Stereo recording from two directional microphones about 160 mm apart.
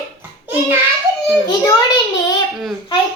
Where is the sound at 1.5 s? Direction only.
25° left (ahead or behind).